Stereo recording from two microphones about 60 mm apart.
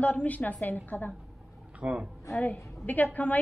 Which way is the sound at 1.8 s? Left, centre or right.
Centre.